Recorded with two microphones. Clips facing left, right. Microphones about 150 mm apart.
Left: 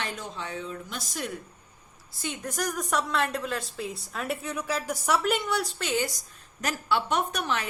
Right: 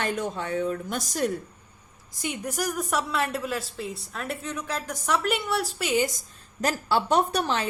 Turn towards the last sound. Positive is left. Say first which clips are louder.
# right 4 dB
turn(degrees=-30)  # may be behind; listen again after turning